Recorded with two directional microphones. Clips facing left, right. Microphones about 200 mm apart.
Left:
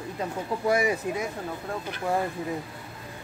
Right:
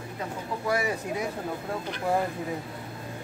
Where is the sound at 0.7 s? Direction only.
15° left (ahead or behind).